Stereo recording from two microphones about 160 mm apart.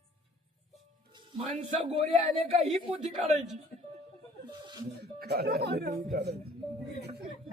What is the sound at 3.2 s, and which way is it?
Speech, centre (ahead or behind).